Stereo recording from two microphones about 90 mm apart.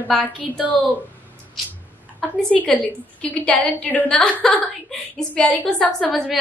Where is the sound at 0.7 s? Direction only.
20° left (ahead or behind).